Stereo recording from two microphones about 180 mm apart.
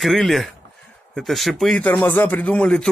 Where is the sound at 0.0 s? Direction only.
Centre (ahead or behind).